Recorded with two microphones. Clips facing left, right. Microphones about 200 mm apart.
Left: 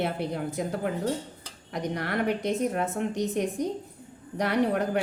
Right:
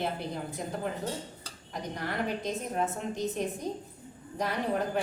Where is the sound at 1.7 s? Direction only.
70° left (ahead or behind).